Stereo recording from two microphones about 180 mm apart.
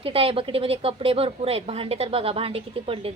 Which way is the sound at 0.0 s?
30° right (ahead or behind).